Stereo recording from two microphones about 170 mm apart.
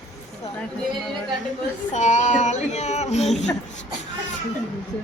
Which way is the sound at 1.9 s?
45° left (ahead or behind).